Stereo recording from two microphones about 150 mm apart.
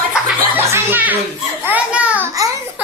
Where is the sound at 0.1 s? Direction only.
15° right (ahead or behind).